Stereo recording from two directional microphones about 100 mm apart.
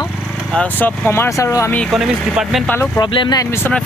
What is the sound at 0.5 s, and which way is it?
Speech, 15° left (ahead or behind).